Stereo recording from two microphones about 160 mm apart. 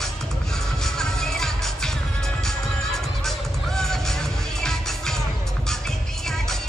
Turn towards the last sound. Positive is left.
turn(degrees=5)  # may be behind; listen again after turning